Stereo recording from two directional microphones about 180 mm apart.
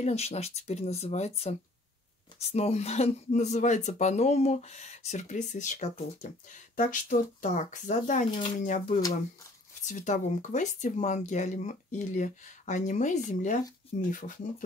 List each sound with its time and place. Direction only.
0.0 s speech: 35° left (ahead or behind)